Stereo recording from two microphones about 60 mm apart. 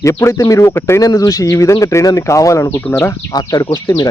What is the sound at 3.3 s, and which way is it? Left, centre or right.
Speech, left.